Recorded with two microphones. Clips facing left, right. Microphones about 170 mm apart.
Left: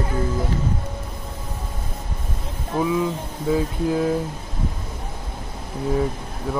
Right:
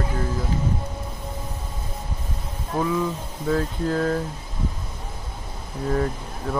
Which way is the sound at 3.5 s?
10° left (ahead or behind).